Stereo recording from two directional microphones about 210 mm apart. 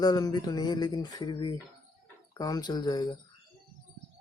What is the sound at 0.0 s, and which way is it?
Speech, 20° left (ahead or behind).